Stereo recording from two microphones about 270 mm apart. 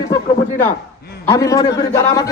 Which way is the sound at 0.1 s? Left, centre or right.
Centre.